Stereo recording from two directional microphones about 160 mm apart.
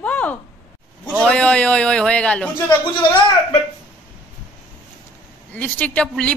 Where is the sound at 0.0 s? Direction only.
10° left (ahead or behind).